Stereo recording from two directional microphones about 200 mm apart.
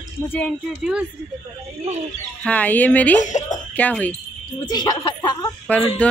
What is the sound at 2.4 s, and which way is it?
Speech, 5° left (ahead or behind).